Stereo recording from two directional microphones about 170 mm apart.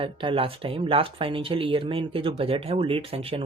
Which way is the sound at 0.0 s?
30° right (ahead or behind).